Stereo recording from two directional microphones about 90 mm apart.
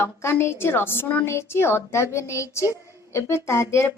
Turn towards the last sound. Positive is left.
turn(degrees=30)  # may be behind; listen again after turning